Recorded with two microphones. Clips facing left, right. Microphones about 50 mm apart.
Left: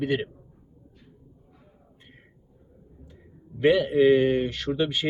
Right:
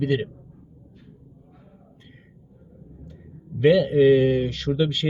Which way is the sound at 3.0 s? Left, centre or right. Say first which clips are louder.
Right 4 dB; centre.